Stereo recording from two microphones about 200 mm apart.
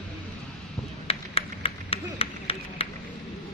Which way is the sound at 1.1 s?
30° left (ahead or behind).